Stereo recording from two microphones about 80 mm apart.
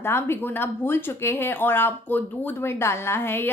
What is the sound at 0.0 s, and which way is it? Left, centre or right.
Speech, left.